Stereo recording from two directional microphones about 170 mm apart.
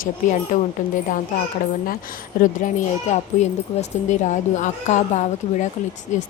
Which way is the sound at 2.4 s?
50° left (ahead or behind).